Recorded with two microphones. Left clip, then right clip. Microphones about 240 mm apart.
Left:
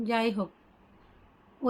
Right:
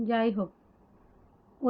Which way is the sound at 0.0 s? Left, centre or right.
Centre.